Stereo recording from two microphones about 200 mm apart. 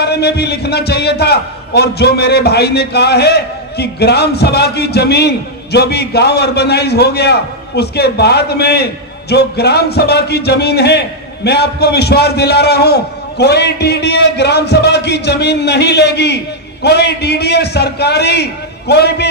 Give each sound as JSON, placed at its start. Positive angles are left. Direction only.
{"t": 0.0, "sound": "a man's voice", "side_deg": 55}